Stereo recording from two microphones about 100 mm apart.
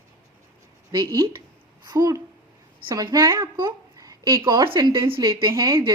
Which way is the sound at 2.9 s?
35° right (ahead or behind).